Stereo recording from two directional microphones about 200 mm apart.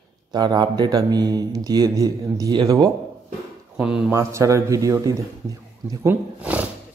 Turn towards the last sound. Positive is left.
turn(degrees=-5)  # may be behind; listen again after turning